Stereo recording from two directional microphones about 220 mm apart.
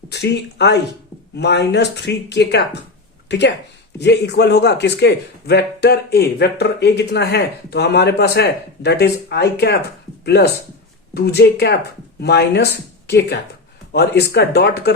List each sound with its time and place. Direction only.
0.1 s speech: 50° left (ahead or behind)
13.9 s speech: 50° left (ahead or behind)